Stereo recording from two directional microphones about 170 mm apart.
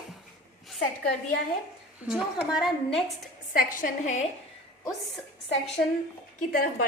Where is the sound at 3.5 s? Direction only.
55° left (ahead or behind).